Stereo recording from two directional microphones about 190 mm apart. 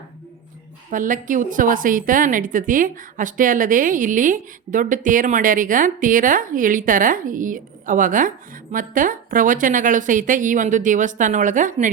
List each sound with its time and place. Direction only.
0.9 s a woman's voice: 45° right (ahead or behind)